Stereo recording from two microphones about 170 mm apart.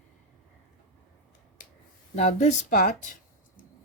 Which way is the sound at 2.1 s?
40° left (ahead or behind).